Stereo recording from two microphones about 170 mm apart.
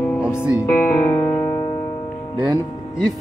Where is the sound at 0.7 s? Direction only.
10° left (ahead or behind).